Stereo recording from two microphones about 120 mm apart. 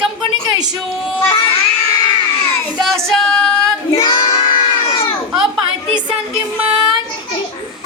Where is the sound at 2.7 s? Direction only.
Centre (ahead or behind).